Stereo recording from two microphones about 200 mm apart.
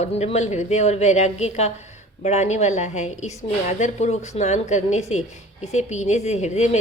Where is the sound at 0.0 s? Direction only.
30° left (ahead or behind).